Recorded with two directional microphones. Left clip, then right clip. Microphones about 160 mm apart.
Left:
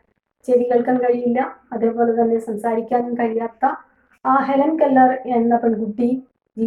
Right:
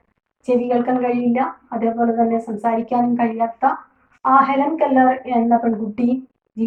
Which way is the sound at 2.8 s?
5° left (ahead or behind).